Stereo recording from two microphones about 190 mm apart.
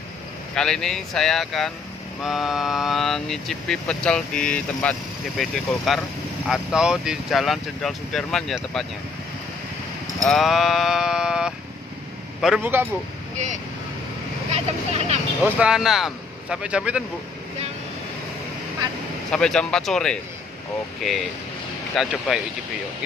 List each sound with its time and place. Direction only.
0.6 s speech: 5° left (ahead or behind)
10.2 s speech: centre (ahead or behind)
14.5 s speech: 35° right (ahead or behind)
15.4 s speech: 5° right (ahead or behind)
19.3 s speech: 5° left (ahead or behind)
21.9 s speech: 5° right (ahead or behind)